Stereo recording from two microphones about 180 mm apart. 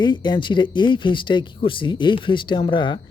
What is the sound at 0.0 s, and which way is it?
Speech, 25° left (ahead or behind).